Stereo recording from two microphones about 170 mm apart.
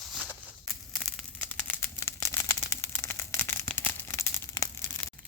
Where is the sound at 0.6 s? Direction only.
Centre (ahead or behind).